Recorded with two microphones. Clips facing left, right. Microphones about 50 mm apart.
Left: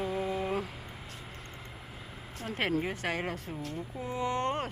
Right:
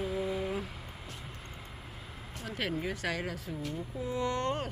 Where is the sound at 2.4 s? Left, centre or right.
Left.